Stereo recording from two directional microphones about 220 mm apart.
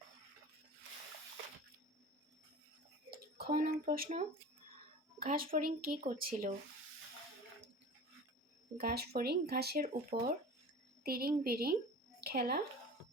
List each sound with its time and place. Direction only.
3.1 s drip: 45° right (ahead or behind)
5.2 s speech: 40° right (ahead or behind)
8.8 s speech: 45° right (ahead or behind)